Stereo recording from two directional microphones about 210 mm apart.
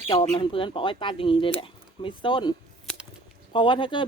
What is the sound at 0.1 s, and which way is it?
Speech, 25° left (ahead or behind).